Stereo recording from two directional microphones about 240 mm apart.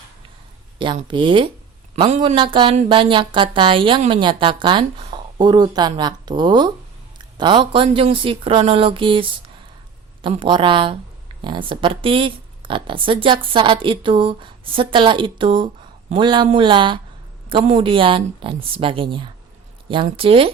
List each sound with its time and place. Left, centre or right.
0.8 s speech: centre